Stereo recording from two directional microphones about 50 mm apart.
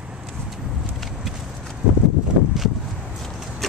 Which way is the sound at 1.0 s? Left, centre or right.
Centre.